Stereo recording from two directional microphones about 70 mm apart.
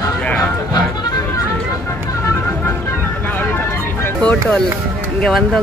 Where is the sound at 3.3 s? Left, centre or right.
Left.